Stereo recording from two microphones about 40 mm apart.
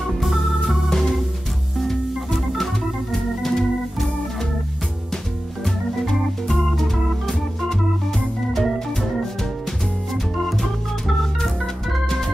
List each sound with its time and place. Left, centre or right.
0.2 s organ: centre
0.8 s organ: centre
1.8 s music: centre
3.1 s organ: centre
5.9 s organ: centre
8.5 s organ: centre
10.3 s organ: centre